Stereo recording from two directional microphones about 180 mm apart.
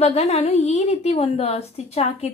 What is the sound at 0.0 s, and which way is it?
A woman's voice, 35° left (ahead or behind).